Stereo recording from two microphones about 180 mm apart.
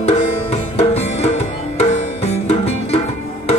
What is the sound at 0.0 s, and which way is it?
Music, 35° left (ahead or behind).